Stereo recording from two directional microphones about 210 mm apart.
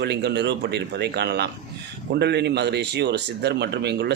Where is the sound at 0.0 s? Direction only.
50° right (ahead or behind).